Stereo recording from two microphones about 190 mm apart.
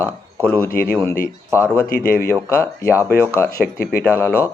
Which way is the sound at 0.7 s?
50° left (ahead or behind).